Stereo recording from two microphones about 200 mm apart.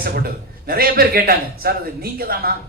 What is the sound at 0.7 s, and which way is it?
Speech, 50° right (ahead or behind).